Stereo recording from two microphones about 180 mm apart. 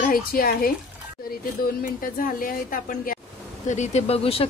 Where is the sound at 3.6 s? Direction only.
40° left (ahead or behind).